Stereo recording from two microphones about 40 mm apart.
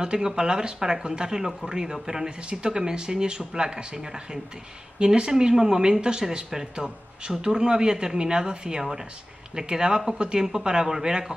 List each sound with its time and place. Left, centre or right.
0.0 s speech: centre